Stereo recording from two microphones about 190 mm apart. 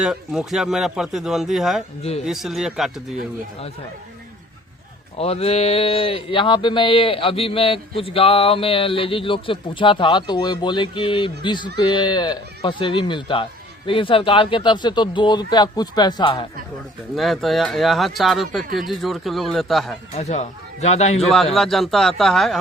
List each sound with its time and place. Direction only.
0.0 s speech: 5° right (ahead or behind)
5.1 s speech: 30° left (ahead or behind)
17.2 s speech: centre (ahead or behind)
20.1 s speech: 35° left (ahead or behind)
21.2 s speech: centre (ahead or behind)